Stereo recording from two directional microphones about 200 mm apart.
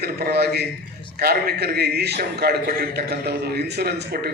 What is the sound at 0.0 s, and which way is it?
A man's voice, 50° right (ahead or behind).